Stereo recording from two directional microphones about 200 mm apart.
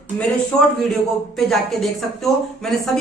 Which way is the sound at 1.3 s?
Centre (ahead or behind).